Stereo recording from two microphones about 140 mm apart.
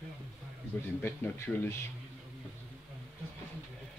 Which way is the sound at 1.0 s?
15° left (ahead or behind).